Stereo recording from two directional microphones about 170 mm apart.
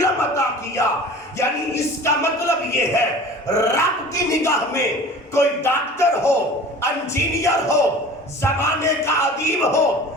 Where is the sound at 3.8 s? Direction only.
15° left (ahead or behind).